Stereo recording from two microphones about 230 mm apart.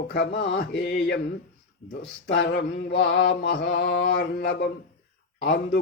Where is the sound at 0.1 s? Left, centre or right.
Left.